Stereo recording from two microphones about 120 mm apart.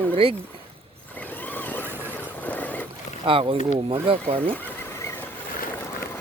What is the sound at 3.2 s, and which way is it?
Speech, 50° right (ahead or behind).